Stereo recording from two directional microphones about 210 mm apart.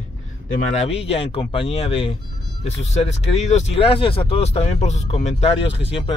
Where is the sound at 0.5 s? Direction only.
30° left (ahead or behind).